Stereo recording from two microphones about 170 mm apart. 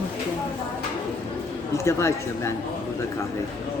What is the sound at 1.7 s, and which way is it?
Speech, 15° left (ahead or behind).